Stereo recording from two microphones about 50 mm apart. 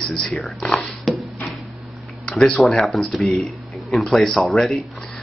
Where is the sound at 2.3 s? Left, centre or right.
Centre.